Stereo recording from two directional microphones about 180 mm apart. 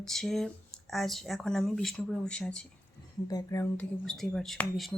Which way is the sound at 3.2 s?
20° left (ahead or behind).